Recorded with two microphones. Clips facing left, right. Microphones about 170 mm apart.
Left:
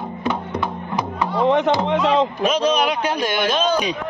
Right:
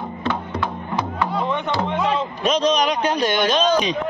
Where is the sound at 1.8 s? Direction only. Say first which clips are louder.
Left 4 dB; 90° left.